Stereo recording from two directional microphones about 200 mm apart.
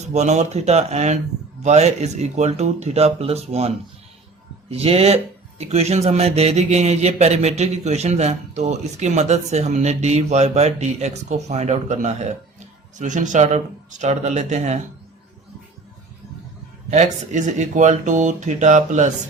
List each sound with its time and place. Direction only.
0.0 s speech: 35° right (ahead or behind)
4.7 s speech: 30° right (ahead or behind)
16.9 s speech: 35° right (ahead or behind)